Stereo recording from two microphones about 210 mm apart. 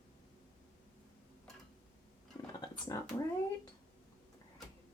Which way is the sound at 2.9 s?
15° left (ahead or behind).